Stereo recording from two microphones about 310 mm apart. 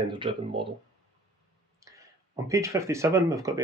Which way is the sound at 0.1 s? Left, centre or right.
Centre.